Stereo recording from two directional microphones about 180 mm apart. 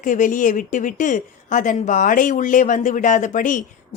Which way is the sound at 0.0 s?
45° left (ahead or behind).